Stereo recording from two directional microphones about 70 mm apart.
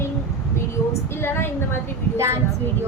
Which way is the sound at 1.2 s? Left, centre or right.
Left.